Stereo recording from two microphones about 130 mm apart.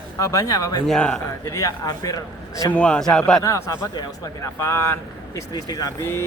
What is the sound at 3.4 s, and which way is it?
A man's voice, 25° left (ahead or behind).